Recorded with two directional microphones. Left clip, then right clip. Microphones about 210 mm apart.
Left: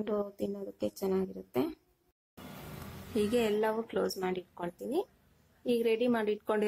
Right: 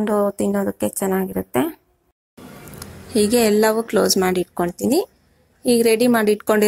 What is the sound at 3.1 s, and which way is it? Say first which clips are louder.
A woman's voice: right 13 dB; 30° right (ahead or behind).